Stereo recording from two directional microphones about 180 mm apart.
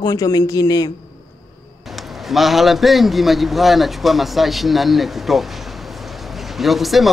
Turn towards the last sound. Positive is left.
turn(degrees=0)  # may be behind; listen again after turning